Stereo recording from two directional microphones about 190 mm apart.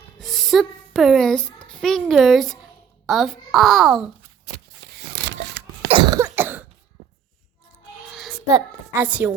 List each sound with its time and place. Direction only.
0.2 s music: centre (ahead or behind)
1.4 s a child's voice: 25° left (ahead or behind)
1.8 s a child's voice: centre (ahead or behind)
4.5 s a sound: 60° right (ahead or behind)
5.9 s cough: 20° right (ahead or behind)
8.1 s a sound: centre (ahead or behind)
8.4 s a woman's voice: 15° right (ahead or behind)